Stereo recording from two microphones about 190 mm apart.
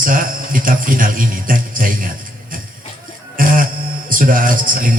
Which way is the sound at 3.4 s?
45° right (ahead or behind).